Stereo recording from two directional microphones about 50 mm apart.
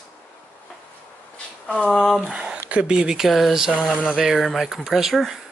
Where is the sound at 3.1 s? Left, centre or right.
Centre.